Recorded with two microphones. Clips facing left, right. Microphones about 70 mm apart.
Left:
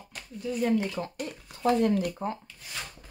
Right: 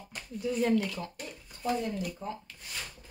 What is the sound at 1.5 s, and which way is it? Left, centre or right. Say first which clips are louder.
Speech: left 8 dB; left.